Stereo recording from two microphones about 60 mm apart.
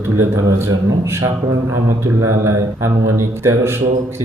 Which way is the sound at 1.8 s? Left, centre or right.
Right.